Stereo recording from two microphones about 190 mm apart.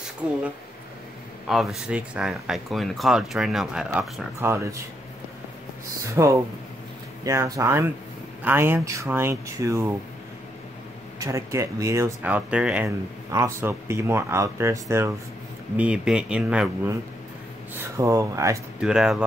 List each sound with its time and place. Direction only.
1.5 s speech: centre (ahead or behind)
6.2 s speech: 15° right (ahead or behind)
11.1 s speech: 15° right (ahead or behind)
17.7 s speech: 15° right (ahead or behind)
18.8 s speech: 5° right (ahead or behind)